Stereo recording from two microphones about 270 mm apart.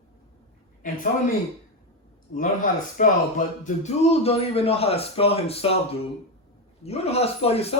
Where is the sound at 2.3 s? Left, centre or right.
Left.